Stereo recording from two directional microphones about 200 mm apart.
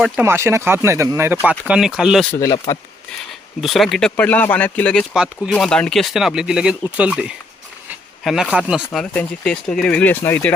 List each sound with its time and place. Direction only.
0.0 s speech: 10° right (ahead or behind)
2.3 s speech: 15° left (ahead or behind)
3.6 s speech: centre (ahead or behind)